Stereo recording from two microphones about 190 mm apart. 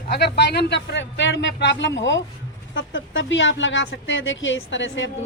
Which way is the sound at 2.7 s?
85° left.